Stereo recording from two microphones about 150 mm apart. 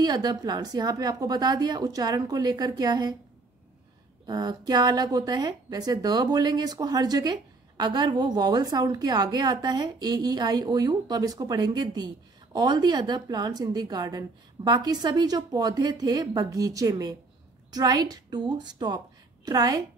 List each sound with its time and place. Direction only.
0.0 s a woman's voice: 25° right (ahead or behind)
4.3 s a woman's voice: 25° right (ahead or behind)